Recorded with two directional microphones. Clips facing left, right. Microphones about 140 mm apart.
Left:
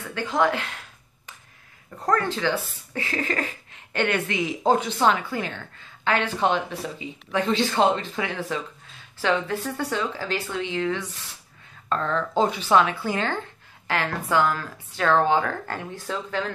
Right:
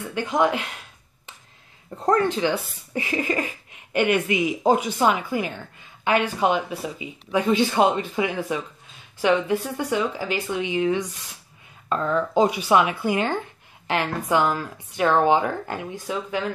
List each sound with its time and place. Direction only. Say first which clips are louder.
0.1 s speech: right 1 dB; 15° right (ahead or behind)
2.0 s speech: right 3 dB; 20° right (ahead or behind)